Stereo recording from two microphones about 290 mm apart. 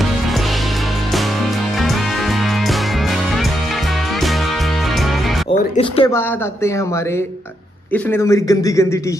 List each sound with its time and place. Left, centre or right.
5.8 s speech: centre
7.9 s speech: centre